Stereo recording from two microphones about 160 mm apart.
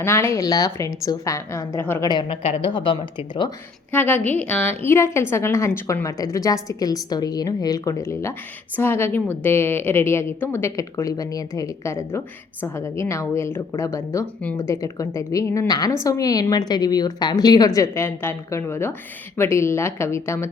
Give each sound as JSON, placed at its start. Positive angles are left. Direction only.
{"t": 0.0, "sound": "a woman's voice", "side_deg": 15}
{"t": 2.0, "sound": "speech", "side_deg": 30}
{"t": 3.9, "sound": "a woman's voice", "side_deg": 10}